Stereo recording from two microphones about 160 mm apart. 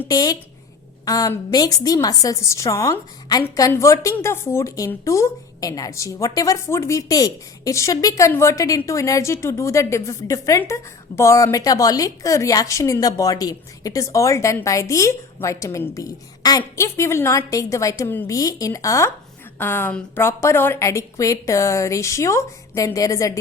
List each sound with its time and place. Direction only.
0.1 s a woman's voice: 25° left (ahead or behind)